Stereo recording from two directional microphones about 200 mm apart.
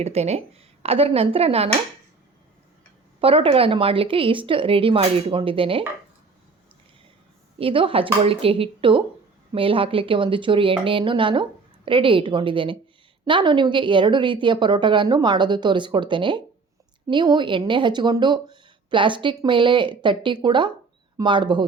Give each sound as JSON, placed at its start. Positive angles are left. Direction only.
{"t": 0.0, "sound": "speech", "side_deg": -30}
{"t": 3.2, "sound": "speech", "side_deg": -30}
{"t": 7.6, "sound": "speech", "side_deg": -25}